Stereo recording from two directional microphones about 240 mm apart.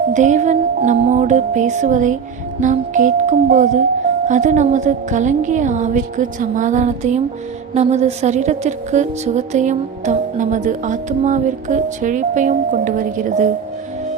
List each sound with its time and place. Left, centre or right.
0.1 s a woman's voice: right